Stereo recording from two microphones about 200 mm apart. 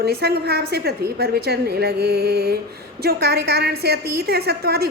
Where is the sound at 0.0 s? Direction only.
50° right (ahead or behind).